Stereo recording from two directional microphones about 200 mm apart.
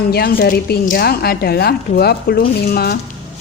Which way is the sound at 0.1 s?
50° left (ahead or behind).